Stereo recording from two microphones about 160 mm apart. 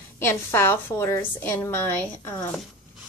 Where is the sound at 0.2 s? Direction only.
15° left (ahead or behind).